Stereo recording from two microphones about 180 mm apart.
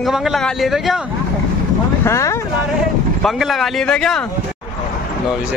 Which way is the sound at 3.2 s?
Centre (ahead or behind).